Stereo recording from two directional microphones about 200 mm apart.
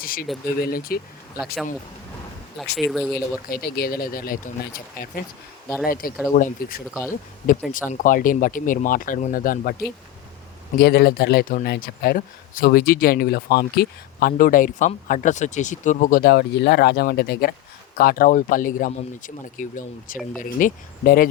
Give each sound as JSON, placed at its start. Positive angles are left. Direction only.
{"t": 0.0, "sound": "speech", "side_deg": 45}
{"t": 2.7, "sound": "speech", "side_deg": 0}
{"t": 3.5, "sound": "speech", "side_deg": 50}
{"t": 10.8, "sound": "speech", "side_deg": 50}